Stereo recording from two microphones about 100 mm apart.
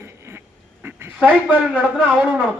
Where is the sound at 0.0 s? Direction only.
25° right (ahead or behind).